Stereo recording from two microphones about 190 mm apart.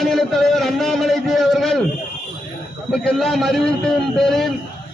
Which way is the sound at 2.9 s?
5° left (ahead or behind).